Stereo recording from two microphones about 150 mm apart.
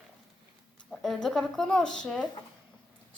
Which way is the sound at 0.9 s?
Centre (ahead or behind).